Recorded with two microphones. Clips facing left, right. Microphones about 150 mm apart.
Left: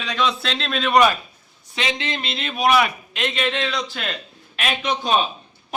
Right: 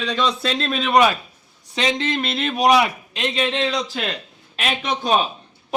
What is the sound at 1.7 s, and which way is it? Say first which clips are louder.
Speech: right 4 dB; 40° right (ahead or behind).